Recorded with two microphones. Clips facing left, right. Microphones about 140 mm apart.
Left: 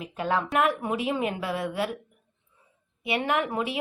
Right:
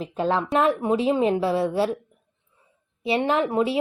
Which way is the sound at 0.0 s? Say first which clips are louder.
Right 4 dB; 30° right (ahead or behind).